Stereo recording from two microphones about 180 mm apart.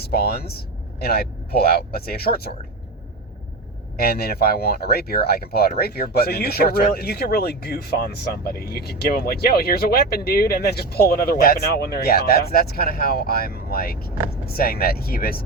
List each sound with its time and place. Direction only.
0.0 s speech: 60° left (ahead or behind)
3.9 s speech: 60° left (ahead or behind)